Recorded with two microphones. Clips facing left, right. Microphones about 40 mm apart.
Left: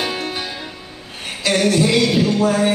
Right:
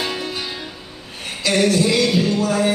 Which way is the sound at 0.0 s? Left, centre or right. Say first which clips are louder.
Left 2 dB; left.